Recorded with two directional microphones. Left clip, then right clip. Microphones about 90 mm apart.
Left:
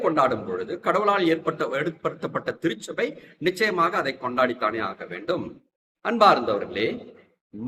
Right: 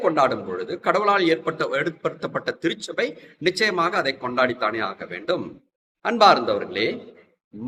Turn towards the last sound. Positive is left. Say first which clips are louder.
# right 2 dB
turn(degrees=-25)  # may be behind; listen again after turning